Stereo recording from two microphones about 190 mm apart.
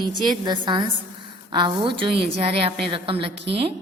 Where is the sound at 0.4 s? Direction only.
25° right (ahead or behind).